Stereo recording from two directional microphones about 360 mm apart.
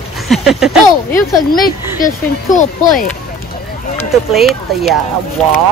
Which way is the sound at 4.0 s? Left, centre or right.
Centre.